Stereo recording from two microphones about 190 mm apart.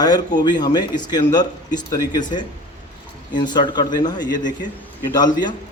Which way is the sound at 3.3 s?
25° left (ahead or behind).